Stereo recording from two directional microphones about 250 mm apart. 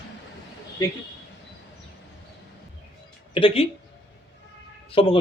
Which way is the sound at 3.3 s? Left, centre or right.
Left.